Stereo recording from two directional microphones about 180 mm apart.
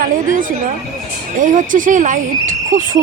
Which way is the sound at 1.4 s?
45° right (ahead or behind).